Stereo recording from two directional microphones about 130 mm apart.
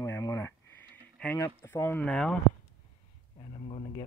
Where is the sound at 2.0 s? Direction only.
5° left (ahead or behind).